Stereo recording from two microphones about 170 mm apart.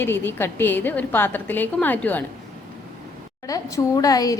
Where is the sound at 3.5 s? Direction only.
20° left (ahead or behind).